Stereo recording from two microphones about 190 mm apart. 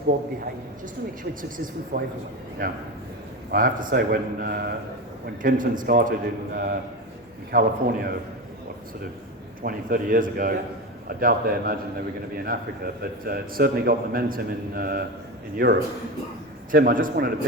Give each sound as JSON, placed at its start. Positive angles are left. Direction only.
{"t": 1.3, "sound": "a man's voice", "side_deg": -45}
{"t": 3.5, "sound": "a man's voice", "side_deg": -45}
{"t": 9.6, "sound": "a man's voice", "side_deg": -45}